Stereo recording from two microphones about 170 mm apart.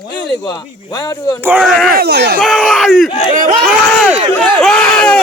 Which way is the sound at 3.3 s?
50° right (ahead or behind).